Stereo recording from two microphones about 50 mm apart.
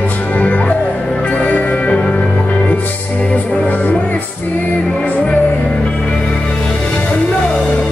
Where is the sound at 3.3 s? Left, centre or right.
Left.